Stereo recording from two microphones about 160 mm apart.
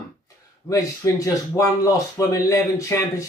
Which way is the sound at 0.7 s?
20° left (ahead or behind).